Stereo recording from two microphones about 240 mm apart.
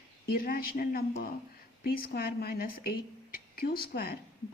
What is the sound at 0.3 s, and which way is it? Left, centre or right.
A woman's voice, left.